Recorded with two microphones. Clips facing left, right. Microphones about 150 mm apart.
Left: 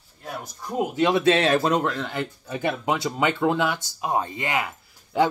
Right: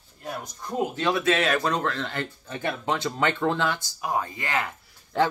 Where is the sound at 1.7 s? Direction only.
10° left (ahead or behind).